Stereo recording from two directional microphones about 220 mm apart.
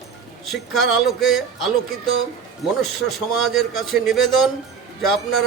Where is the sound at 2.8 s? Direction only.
Centre (ahead or behind).